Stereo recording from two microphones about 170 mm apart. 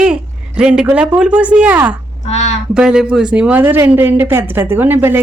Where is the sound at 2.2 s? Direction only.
45° left (ahead or behind).